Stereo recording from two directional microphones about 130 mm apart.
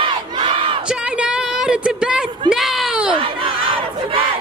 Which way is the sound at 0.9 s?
10° right (ahead or behind).